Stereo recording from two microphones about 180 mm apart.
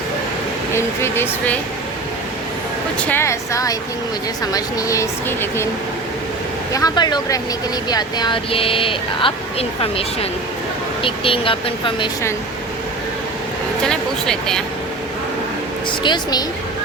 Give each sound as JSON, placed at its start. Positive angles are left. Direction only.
{"t": 0.7, "sound": "speech", "side_deg": 15}
{"t": 3.0, "sound": "speech", "side_deg": 10}
{"t": 6.7, "sound": "speech", "side_deg": 20}
{"t": 13.8, "sound": "speech", "side_deg": 5}
{"t": 15.9, "sound": "speech", "side_deg": 25}